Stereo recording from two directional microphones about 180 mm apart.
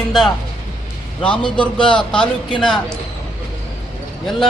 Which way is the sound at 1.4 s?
25° left (ahead or behind).